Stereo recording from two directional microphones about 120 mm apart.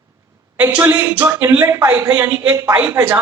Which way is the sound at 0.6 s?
20° right (ahead or behind).